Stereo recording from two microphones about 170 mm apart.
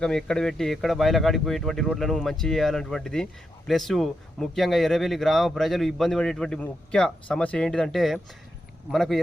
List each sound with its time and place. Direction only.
0.0 s speech: 5° left (ahead or behind)